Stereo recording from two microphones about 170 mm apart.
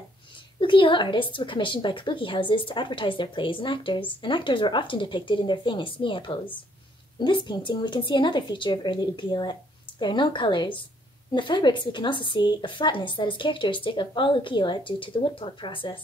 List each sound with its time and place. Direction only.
0.6 s a woman's voice: 30° left (ahead or behind)